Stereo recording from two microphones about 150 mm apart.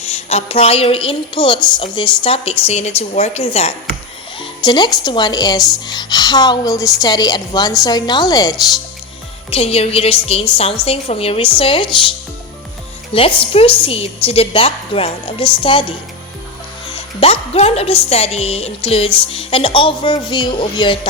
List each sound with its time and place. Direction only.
0.0 s a woman's voice: 45° left (ahead or behind)
4.4 s a woman's voice: 30° left (ahead or behind)
9.5 s a woman's voice: 40° left (ahead or behind)
13.1 s a woman's voice: 40° left (ahead or behind)
17.2 s a woman's voice: 40° left (ahead or behind)